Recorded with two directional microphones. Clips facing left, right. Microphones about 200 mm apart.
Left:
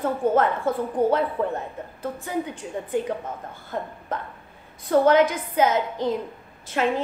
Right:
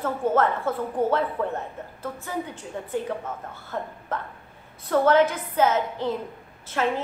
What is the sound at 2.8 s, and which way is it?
A woman's voice, 15° left (ahead or behind).